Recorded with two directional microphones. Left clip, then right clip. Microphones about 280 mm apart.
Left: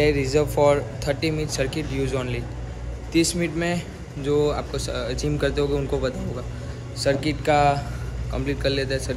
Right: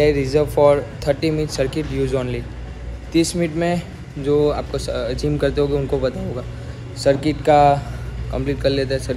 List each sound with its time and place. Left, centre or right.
0.0 s speech: centre